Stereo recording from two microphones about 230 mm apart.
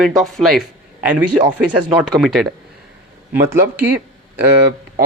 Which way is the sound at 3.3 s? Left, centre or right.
Centre.